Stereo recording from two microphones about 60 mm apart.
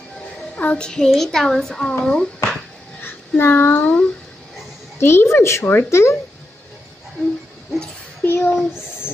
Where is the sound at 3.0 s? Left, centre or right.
Left.